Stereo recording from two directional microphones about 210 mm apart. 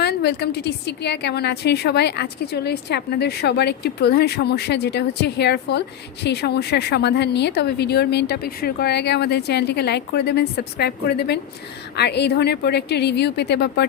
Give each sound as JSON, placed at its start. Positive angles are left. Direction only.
{"t": 0.0, "sound": "a woman's voice", "side_deg": 50}